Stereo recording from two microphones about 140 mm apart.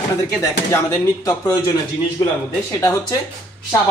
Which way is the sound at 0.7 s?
20° left (ahead or behind).